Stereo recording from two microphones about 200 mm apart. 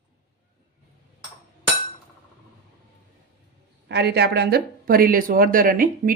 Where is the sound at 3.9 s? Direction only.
55° right (ahead or behind).